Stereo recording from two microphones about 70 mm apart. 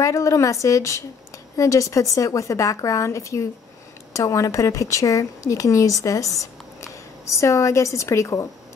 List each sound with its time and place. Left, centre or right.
0.0 s speech: left